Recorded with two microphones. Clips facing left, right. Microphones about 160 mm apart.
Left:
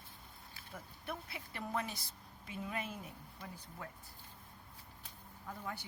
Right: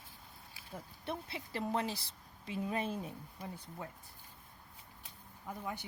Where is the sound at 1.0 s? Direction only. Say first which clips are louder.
Right 4 dB; 30° right (ahead or behind).